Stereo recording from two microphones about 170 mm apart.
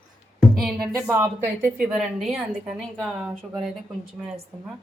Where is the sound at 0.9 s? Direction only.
15° right (ahead or behind).